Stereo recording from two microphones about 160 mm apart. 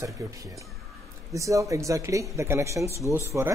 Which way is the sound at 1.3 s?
20° right (ahead or behind).